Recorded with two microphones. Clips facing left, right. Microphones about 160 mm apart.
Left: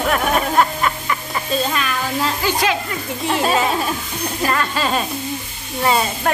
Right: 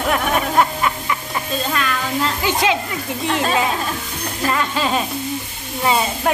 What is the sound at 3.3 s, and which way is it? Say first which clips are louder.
Speech: left 2 dB; 10° left (ahead or behind).